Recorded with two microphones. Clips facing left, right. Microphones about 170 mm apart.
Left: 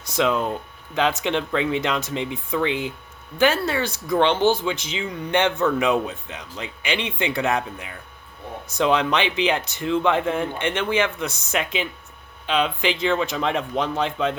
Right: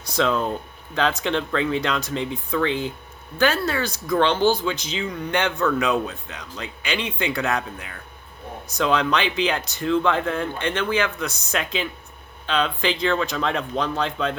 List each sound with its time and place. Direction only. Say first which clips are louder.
0.0 s speech: even; 15° left (ahead or behind)